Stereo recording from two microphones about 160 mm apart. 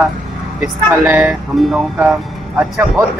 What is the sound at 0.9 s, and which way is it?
Speech, 15° right (ahead or behind).